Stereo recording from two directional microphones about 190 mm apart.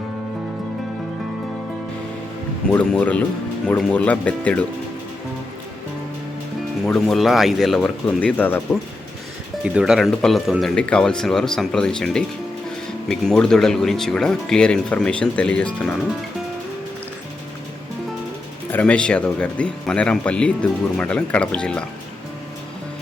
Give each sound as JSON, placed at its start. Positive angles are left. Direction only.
{"t": 2.6, "sound": "speech", "side_deg": 5}
{"t": 6.8, "sound": "speech", "side_deg": 0}
{"t": 9.6, "sound": "speech", "side_deg": -5}
{"t": 18.7, "sound": "speech", "side_deg": 5}